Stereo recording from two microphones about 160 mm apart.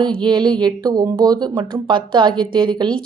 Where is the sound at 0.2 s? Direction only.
30° right (ahead or behind).